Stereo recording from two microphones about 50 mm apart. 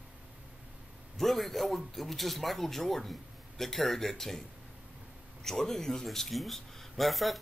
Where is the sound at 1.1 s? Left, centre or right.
Centre.